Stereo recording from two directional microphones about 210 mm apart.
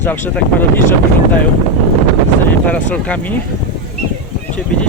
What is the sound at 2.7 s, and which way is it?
Speech, 5° left (ahead or behind).